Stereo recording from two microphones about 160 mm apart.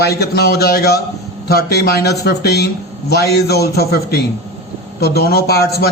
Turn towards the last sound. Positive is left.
turn(degrees=80)